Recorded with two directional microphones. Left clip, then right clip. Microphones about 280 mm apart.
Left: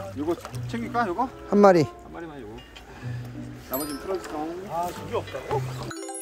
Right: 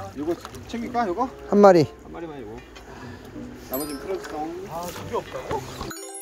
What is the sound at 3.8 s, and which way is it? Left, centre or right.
Speech, centre.